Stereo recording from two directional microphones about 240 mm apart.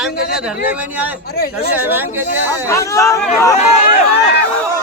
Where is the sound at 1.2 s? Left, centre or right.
Left.